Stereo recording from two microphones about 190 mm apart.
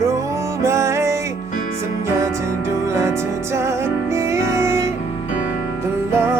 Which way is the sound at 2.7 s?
15° right (ahead or behind).